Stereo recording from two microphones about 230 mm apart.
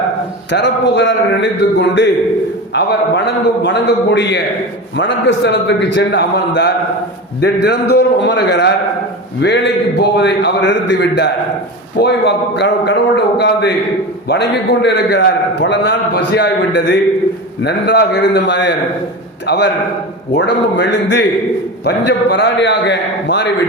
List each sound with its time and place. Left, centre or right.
0.5 s a man's voice: left
2.7 s a man's voice: left
11.9 s a man's voice: left